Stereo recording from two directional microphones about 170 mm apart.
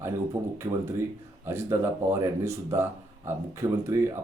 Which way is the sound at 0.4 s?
20° right (ahead or behind).